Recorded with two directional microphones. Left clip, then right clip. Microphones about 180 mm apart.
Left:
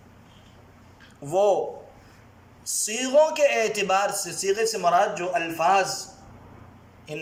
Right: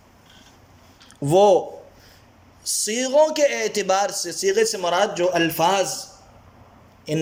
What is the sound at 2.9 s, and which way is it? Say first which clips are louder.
A man's voice: right 2 dB; 30° right (ahead or behind).